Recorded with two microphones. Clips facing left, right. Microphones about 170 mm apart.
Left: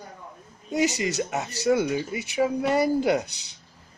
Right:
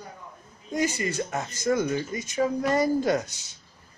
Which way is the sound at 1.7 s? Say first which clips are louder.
Left 2 dB; 10° left (ahead or behind).